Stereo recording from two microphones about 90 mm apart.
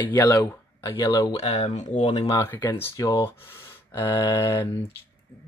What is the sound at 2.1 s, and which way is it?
Speech, 40° left (ahead or behind).